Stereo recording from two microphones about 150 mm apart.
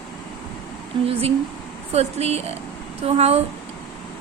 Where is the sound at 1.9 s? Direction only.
45° right (ahead or behind).